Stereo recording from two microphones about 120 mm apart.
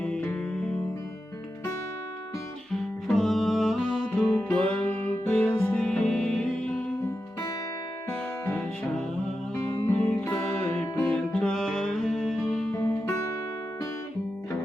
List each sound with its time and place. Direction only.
0.0 s music: 10° left (ahead or behind)
3.1 s music: centre (ahead or behind)
5.5 s music: 5° left (ahead or behind)
8.4 s music: 15° left (ahead or behind)
12.7 s music: 15° left (ahead or behind)